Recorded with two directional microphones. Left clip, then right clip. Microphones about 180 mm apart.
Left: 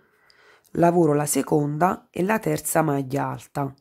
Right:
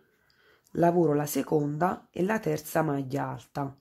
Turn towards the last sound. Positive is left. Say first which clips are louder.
# left 6 dB
turn(degrees=15)  # may be behind; listen again after turning